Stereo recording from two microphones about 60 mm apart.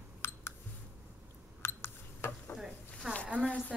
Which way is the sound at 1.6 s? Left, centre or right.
Left.